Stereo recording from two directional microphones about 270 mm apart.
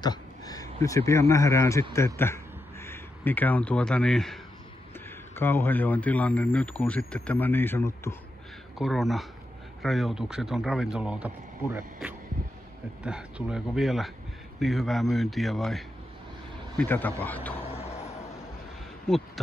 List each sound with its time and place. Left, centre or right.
0.0 s speech: centre
19.0 s speech: centre